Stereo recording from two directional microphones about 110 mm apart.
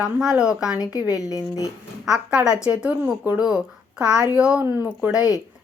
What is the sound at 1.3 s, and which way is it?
Speech, 30° left (ahead or behind).